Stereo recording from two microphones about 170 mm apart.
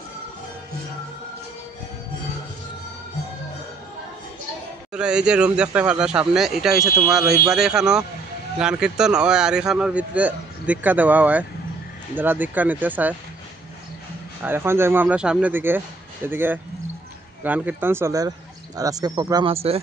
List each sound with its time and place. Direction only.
4.9 s a man's voice: 5° right (ahead or behind)
14.4 s speech: 15° right (ahead or behind); by 19.8 s 35° right (ahead or behind)